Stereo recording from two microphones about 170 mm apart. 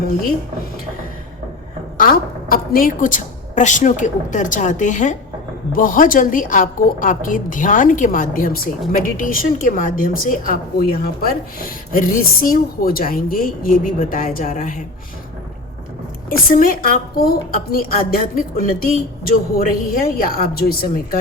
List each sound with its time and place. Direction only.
2.0 s a woman's voice: 55° left (ahead or behind)
16.3 s a woman's voice: 55° left (ahead or behind)